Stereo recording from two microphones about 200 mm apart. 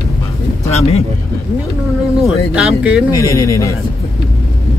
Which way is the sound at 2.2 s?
5° right (ahead or behind).